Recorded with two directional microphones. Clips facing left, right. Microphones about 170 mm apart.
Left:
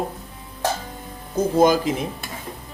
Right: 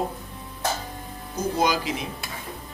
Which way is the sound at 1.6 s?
45° left (ahead or behind).